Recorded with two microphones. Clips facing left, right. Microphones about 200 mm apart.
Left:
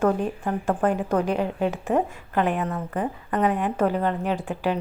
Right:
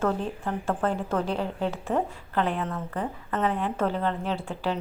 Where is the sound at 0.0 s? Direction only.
15° left (ahead or behind).